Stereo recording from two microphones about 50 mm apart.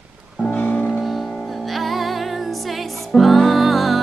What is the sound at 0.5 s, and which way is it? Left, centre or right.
Music, left.